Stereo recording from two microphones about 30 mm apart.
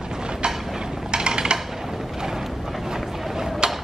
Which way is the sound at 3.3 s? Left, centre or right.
Centre.